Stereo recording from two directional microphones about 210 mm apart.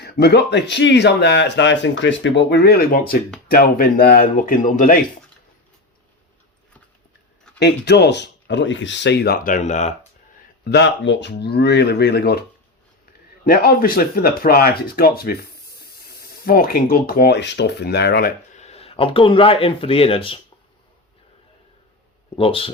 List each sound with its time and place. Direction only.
0.0 s speech: 50° left (ahead or behind)
7.6 s speech: 50° left (ahead or behind); by 9.9 s 35° left (ahead or behind)
10.6 s speech: 55° left (ahead or behind)
18.6 s speech: 30° left (ahead or behind)
22.4 s speech: 25° left (ahead or behind)